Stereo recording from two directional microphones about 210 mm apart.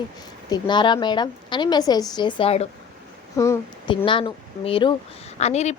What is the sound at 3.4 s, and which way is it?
A woman's voice, 15° left (ahead or behind).